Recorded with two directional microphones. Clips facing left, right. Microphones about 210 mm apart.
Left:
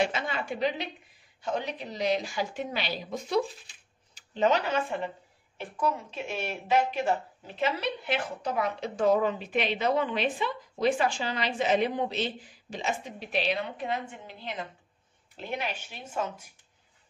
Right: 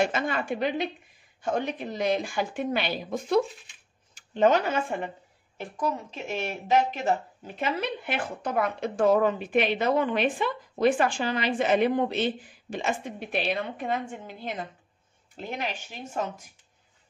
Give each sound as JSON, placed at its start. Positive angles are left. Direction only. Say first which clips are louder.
{"t": 0.0, "sound": "speech", "louder": "right 3 dB", "side_deg": -50}